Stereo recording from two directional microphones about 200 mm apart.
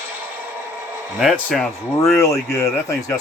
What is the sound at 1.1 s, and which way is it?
Speech, centre (ahead or behind).